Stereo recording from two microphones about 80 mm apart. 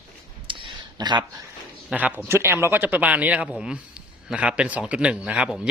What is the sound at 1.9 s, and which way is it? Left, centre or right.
Speech, centre.